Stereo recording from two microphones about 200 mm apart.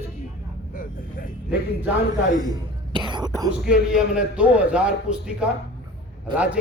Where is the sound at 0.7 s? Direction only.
45° left (ahead or behind).